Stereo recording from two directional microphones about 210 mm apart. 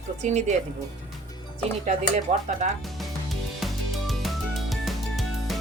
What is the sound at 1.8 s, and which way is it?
Speech, 35° right (ahead or behind).